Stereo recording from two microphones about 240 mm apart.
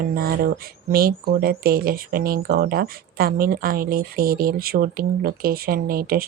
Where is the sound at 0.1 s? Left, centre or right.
Right.